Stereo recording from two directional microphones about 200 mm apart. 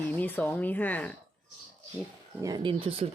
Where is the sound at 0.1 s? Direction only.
10° left (ahead or behind).